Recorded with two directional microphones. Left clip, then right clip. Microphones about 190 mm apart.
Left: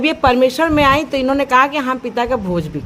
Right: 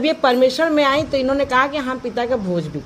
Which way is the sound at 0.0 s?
15° left (ahead or behind).